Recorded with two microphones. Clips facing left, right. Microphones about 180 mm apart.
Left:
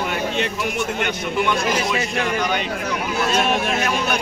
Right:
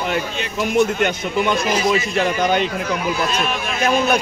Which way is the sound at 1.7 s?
60° left (ahead or behind).